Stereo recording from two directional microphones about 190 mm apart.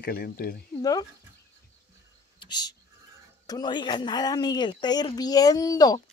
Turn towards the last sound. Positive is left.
turn(degrees=20)  # may be behind; listen again after turning